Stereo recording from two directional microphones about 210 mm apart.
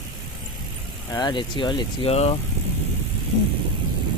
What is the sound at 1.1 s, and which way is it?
Speech, 20° left (ahead or behind).